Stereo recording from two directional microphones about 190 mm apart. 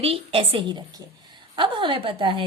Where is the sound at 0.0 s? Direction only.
30° right (ahead or behind).